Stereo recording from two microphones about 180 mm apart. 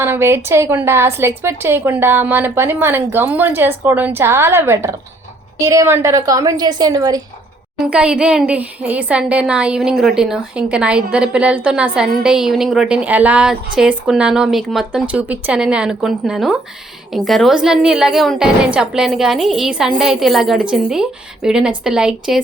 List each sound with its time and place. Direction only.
0.0 s a woman's voice: 15° right (ahead or behind)
7.9 s speech: 5° right (ahead or behind)